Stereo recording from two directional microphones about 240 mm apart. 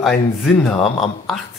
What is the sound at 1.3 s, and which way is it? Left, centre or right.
Speech, centre.